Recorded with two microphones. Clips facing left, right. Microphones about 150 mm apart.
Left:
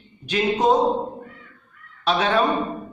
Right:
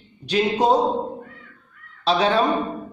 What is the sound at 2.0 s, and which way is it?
Speech, 35° right (ahead or behind).